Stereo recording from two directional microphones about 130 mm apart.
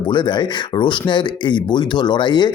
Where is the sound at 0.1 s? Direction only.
35° left (ahead or behind).